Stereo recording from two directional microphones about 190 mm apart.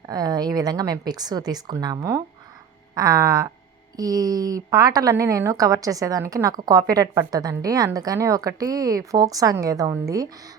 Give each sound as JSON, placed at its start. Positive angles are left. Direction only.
{"t": 0.1, "sound": "a woman's voice", "side_deg": -20}